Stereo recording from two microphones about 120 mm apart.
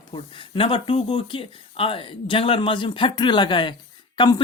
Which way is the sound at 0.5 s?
50° left (ahead or behind).